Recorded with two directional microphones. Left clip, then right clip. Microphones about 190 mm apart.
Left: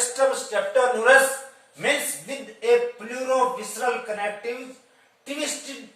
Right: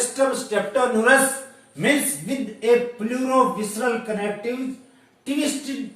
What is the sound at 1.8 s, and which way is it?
A man's voice, centre (ahead or behind).